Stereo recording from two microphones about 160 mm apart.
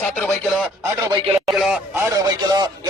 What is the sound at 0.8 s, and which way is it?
Speech, 25° right (ahead or behind).